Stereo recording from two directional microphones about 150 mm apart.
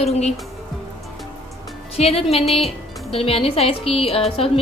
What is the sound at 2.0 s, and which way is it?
A woman's voice, 40° left (ahead or behind).